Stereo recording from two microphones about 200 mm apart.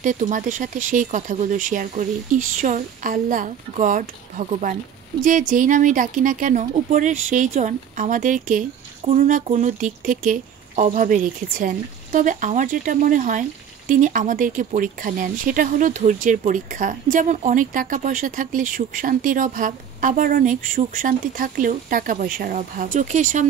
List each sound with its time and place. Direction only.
0.0 s speech: 40° right (ahead or behind)